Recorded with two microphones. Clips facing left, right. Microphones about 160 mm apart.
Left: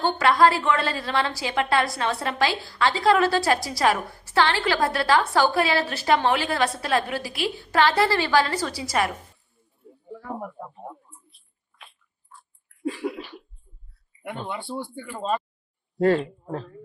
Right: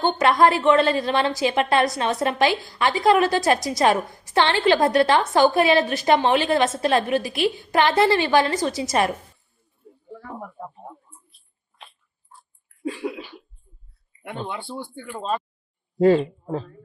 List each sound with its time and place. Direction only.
0.0 s a woman's voice: 20° right (ahead or behind)
10.1 s a sound: 10° left (ahead or behind)
13.0 s speech: centre (ahead or behind)